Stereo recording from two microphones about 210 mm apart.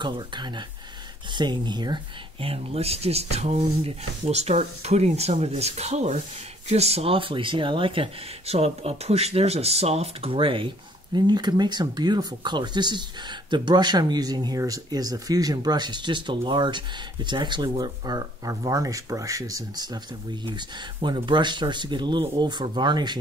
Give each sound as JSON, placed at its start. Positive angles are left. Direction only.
{"t": 0.0, "sound": "speech", "side_deg": -20}